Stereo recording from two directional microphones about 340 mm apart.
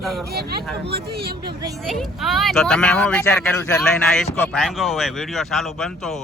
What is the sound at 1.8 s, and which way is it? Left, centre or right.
Speech, centre.